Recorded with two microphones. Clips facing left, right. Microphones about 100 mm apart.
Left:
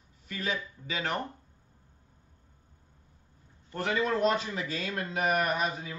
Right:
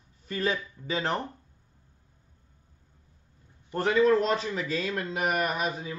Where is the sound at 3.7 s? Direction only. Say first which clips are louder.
Right 7 dB; 35° right (ahead or behind).